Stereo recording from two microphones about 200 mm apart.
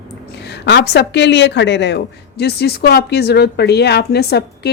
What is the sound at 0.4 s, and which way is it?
A woman's voice, 55° left (ahead or behind).